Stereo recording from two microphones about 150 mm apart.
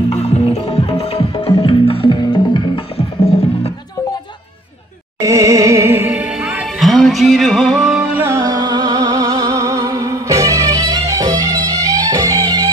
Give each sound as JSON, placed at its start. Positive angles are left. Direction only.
{"t": 0.1, "sound": "music", "side_deg": 45}
{"t": 5.2, "sound": "music", "side_deg": -20}